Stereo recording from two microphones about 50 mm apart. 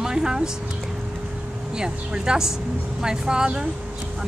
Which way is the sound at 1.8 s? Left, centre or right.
Centre.